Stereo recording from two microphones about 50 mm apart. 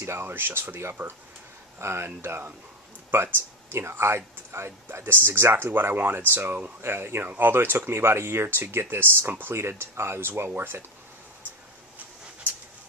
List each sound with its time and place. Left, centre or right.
0.0 s speech: right
0.3 s speech: right
1.8 s speech: right
3.7 s speech: right
6.8 s speech: right
10.5 s speech: right